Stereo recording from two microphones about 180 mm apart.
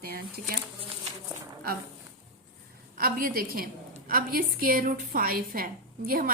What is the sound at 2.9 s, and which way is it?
A woman's voice, 55° right (ahead or behind).